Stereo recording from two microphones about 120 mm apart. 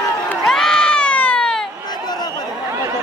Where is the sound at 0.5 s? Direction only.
5° left (ahead or behind).